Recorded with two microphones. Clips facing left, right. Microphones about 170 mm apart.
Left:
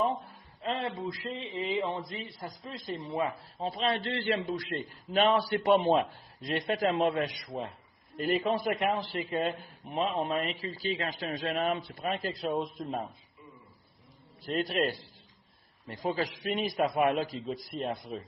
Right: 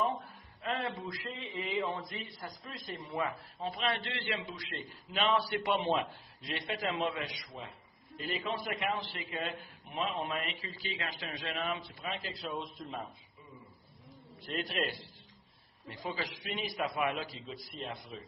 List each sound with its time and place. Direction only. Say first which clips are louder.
0.0 s a sound: left 3 dB; 30° left (ahead or behind)
1.4 s a man's voice: left 3 dB; 25° left (ahead or behind); by 13.1 s 50° left (ahead or behind)
14.4 s a man's voice: left 6 dB; 40° left (ahead or behind)